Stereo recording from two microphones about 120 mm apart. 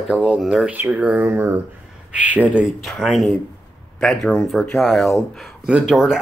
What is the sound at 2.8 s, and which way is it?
Speech, centre (ahead or behind).